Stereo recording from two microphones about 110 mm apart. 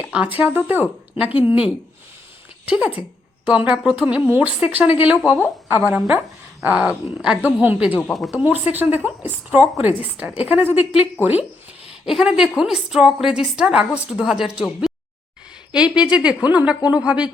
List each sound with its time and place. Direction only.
0.0 s speech: 15° right (ahead or behind)
2.6 s speech: 10° right (ahead or behind)
8.1 s a woman's voice: centre (ahead or behind)
8.7 s speech: 15° right (ahead or behind)
12.0 s a woman's voice: 5° right (ahead or behind)